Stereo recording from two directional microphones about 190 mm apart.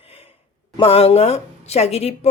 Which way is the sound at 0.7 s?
30° left (ahead or behind).